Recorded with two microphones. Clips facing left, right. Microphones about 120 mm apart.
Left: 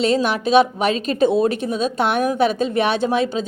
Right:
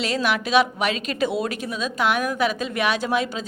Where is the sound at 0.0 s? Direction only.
25° left (ahead or behind).